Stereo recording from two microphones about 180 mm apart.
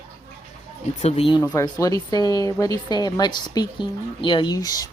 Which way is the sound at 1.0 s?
35° left (ahead or behind).